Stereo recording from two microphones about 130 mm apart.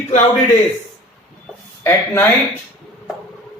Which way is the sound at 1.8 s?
15° left (ahead or behind).